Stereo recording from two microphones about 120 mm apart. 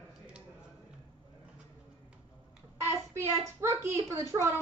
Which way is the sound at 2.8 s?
20° right (ahead or behind).